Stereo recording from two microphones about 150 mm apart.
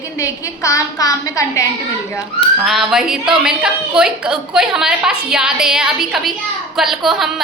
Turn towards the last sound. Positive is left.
turn(degrees=0)  # may be behind; listen again after turning